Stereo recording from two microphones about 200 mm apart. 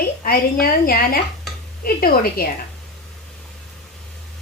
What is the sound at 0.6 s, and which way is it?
Speech, 50° left (ahead or behind).